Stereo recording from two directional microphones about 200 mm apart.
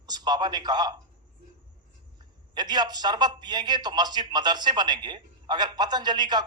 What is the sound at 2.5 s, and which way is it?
A man's voice, 20° right (ahead or behind).